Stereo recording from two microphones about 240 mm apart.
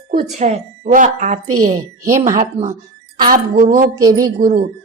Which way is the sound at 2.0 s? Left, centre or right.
Centre.